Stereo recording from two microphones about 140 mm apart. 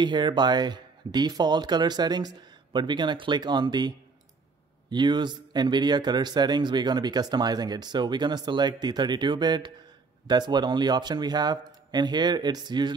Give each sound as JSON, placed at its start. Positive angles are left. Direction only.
{"t": 0.0, "sound": "speech", "side_deg": -35}